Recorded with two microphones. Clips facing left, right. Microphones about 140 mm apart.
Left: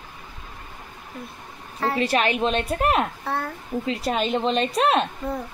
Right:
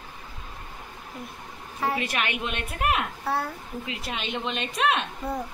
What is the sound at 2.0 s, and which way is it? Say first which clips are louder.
Speech: left 8 dB; 35° left (ahead or behind).